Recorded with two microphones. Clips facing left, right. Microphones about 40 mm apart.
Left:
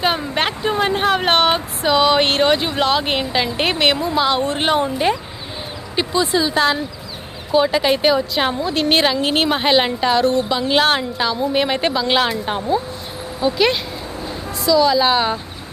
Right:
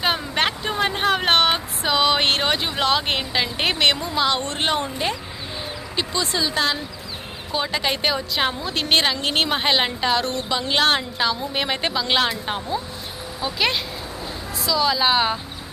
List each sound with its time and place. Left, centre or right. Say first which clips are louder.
0.0 s a woman's voice: left 3 dB; centre